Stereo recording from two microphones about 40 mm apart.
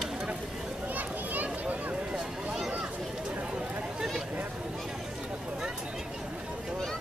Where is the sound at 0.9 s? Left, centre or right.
Right.